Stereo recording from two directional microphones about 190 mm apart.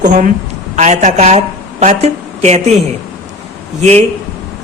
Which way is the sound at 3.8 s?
35° right (ahead or behind).